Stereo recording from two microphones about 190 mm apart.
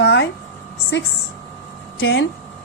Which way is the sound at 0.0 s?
70° left (ahead or behind).